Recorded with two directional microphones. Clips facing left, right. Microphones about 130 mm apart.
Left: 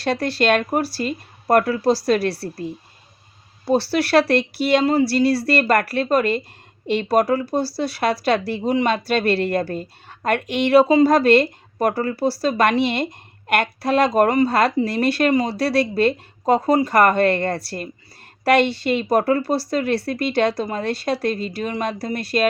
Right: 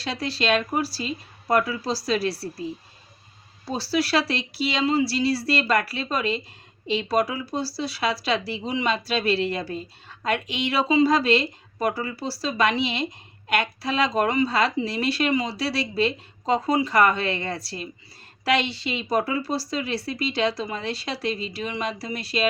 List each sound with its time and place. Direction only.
0.0 s speech: 55° left (ahead or behind)